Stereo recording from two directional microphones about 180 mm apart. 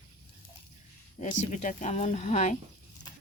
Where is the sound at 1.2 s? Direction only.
40° left (ahead or behind).